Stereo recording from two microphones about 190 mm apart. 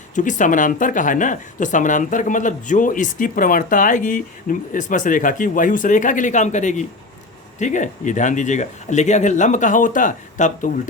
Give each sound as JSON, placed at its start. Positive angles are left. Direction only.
{"t": 0.1, "sound": "speech", "side_deg": 40}